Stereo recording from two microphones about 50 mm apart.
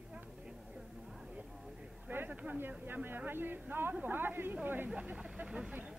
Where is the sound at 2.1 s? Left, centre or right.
Right.